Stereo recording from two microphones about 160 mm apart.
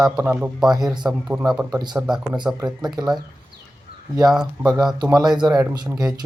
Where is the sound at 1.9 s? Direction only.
5° right (ahead or behind).